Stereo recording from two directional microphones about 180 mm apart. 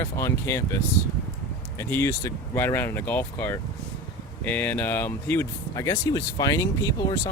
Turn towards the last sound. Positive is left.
turn(degrees=20)  # may be behind; listen again after turning